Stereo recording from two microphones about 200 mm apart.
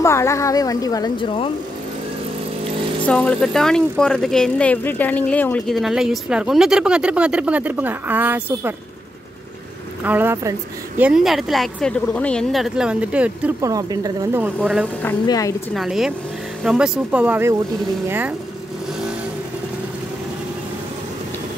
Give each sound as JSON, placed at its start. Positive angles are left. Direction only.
{"t": 0.0, "sound": "a woman's voice", "side_deg": 15}
{"t": 3.1, "sound": "speech", "side_deg": 5}
{"t": 10.0, "sound": "speech", "side_deg": -10}
{"t": 15.2, "sound": "a woman's voice", "side_deg": 20}
{"t": 15.7, "sound": "speech", "side_deg": 0}